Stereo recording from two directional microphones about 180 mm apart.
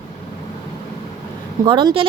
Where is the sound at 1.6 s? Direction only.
25° right (ahead or behind).